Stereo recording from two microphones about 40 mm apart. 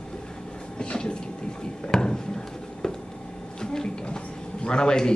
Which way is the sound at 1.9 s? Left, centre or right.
Centre.